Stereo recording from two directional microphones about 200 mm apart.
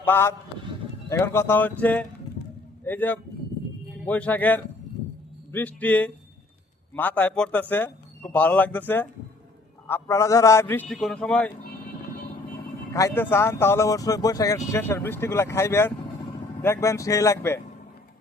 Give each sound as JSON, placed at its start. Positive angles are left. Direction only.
{"t": 0.0, "sound": "speech", "side_deg": 10}
{"t": 9.8, "sound": "speech", "side_deg": 15}
{"t": 12.9, "sound": "speech", "side_deg": 15}